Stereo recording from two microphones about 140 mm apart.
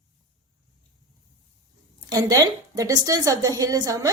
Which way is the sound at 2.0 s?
25° right (ahead or behind).